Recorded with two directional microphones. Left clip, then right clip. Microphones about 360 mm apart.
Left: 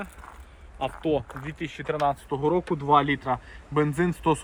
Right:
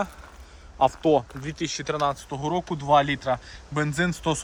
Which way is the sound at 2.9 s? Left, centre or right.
Right.